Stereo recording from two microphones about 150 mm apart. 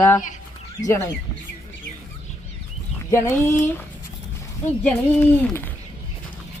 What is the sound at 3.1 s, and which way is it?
Speech, 15° left (ahead or behind).